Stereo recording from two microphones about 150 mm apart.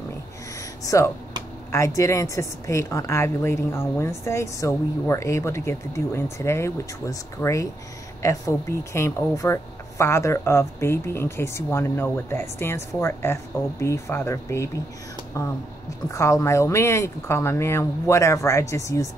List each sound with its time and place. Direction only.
0.8 s a woman's voice: 20° left (ahead or behind)